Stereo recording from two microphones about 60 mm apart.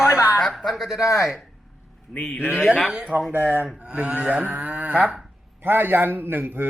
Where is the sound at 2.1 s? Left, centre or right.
Left.